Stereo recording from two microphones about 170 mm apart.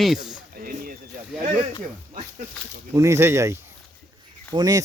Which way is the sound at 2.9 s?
15° right (ahead or behind).